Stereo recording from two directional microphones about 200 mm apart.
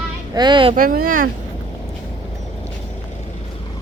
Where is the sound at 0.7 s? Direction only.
45° right (ahead or behind).